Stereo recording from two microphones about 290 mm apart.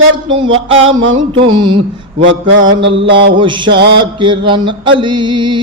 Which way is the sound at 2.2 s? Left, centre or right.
Right.